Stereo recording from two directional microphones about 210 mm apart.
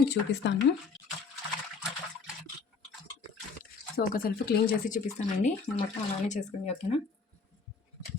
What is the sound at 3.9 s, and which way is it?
Speech, 45° left (ahead or behind).